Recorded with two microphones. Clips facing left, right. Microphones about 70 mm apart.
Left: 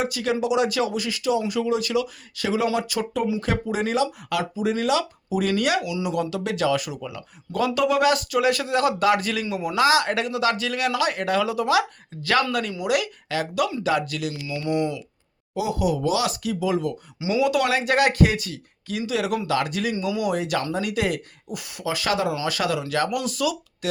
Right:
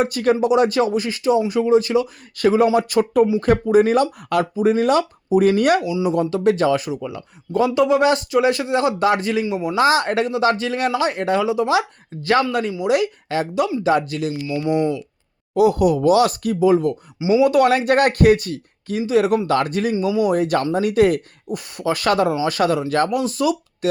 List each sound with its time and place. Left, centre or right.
0.0 s speech: right
2.3 s speech: right
9.8 s speech: right
14.5 s speech: centre
15.5 s speech: right
17.2 s speech: right
17.4 s speech: right